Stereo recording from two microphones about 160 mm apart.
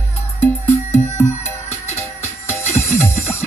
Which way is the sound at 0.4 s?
15° left (ahead or behind).